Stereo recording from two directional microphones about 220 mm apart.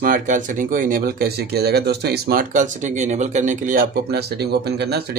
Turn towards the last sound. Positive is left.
turn(degrees=-45)  # may be behind; listen again after turning